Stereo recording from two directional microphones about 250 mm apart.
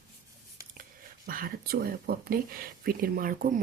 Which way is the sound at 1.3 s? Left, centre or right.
Right.